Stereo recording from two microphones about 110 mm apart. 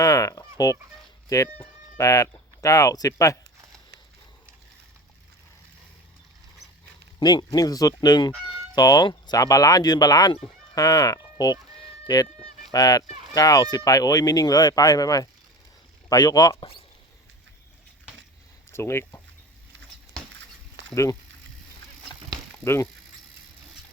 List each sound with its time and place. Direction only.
0.0 s fowl: 30° left (ahead or behind)
2.0 s speech: 30° left (ahead or behind)
7.2 s speech: 40° left (ahead or behind)
16.6 s speech: 55° left (ahead or behind)
18.7 s speech: 25° left (ahead or behind)
20.9 s speech: 30° left (ahead or behind)
22.6 s speech: 25° left (ahead or behind)